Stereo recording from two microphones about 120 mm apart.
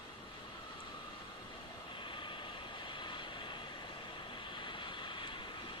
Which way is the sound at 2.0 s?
45° left (ahead or behind).